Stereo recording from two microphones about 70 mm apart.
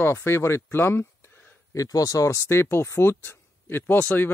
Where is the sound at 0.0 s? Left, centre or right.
Left.